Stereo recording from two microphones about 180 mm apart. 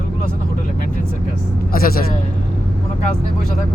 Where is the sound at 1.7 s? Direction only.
55° left (ahead or behind).